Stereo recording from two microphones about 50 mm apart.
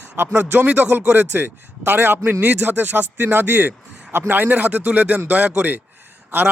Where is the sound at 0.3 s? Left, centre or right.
Right.